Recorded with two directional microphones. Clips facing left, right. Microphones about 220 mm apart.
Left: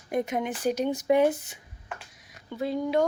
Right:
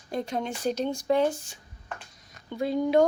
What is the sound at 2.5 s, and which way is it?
Speech, 5° left (ahead or behind).